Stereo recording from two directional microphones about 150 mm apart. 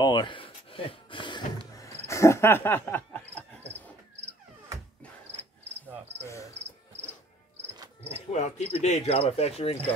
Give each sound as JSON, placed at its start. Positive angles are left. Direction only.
{"t": 0.0, "sound": "a sound", "side_deg": 30}
{"t": 1.8, "sound": "cricket", "side_deg": 20}
{"t": 6.2, "sound": "cricket", "side_deg": 20}
{"t": 8.0, "sound": "cricket", "side_deg": 45}